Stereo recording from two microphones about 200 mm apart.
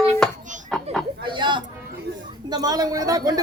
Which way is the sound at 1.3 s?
25° right (ahead or behind).